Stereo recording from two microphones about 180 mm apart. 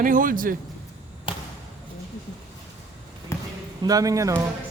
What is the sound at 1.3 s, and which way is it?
Arrow, 30° left (ahead or behind).